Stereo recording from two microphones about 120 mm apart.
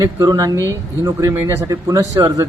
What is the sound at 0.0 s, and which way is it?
A man's voice, 30° right (ahead or behind).